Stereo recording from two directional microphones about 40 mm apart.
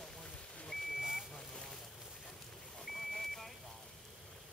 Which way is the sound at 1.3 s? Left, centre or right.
Centre.